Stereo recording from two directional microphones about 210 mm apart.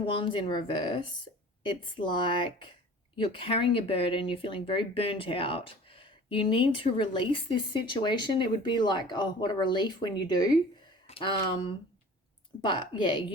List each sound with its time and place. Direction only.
0.2 s speech: 25° left (ahead or behind)
11.0 s a sound: 25° left (ahead or behind)
12.6 s speech: 20° left (ahead or behind)